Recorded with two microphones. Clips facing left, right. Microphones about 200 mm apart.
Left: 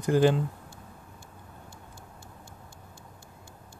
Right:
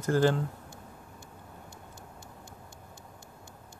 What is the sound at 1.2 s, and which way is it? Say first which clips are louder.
Vehicle: right 1 dB; 20° right (ahead or behind).